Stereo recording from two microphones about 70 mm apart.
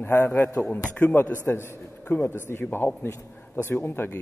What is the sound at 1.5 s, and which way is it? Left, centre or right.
A man's voice, left.